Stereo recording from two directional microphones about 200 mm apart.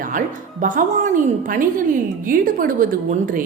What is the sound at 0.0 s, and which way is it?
A woman's voice, 40° right (ahead or behind).